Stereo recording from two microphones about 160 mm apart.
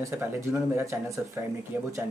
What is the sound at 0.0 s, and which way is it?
Speech, 20° right (ahead or behind).